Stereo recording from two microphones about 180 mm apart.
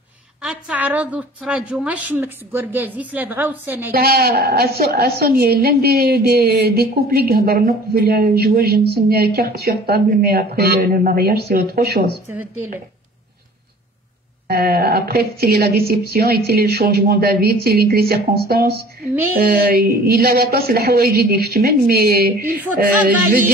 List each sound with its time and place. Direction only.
0.4 s a woman's voice: 5° right (ahead or behind)
3.9 s a woman's voice: 60° right (ahead or behind)
12.3 s a woman's voice: 10° right (ahead or behind)
14.5 s a woman's voice: 60° right (ahead or behind)